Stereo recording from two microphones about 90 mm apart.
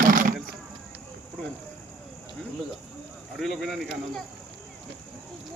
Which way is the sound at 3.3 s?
Centre (ahead or behind).